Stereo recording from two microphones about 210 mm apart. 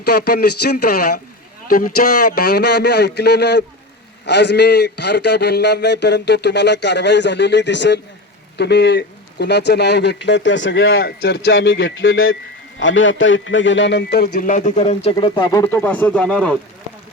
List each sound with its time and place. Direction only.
0.0 s a man's voice: 50° left (ahead or behind)
2.4 s a man's voice: 50° left (ahead or behind); by 11.0 s 65° left (ahead or behind)
11.0 s a man's voice: 50° left (ahead or behind); by 16.6 s 5° left (ahead or behind)